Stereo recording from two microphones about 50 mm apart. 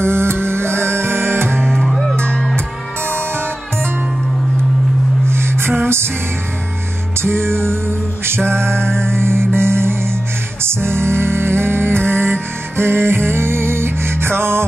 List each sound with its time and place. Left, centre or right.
0.0 s music: right
1.7 s music: centre
2.1 s music: centre
2.5 s music: right
5.3 s music: right
7.2 s music: right